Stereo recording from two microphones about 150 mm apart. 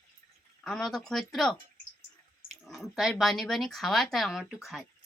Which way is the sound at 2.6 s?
Centre (ahead or behind).